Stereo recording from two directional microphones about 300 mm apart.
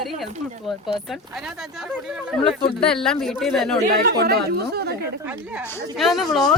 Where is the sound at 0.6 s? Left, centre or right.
Centre.